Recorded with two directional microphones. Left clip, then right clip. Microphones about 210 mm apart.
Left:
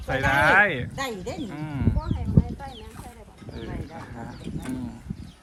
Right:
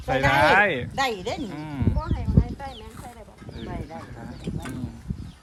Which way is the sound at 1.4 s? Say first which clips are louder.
Even; 5° right (ahead or behind).